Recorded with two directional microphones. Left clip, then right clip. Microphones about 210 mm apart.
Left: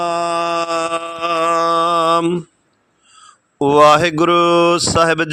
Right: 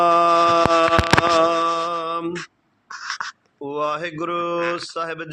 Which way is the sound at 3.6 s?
55° left (ahead or behind).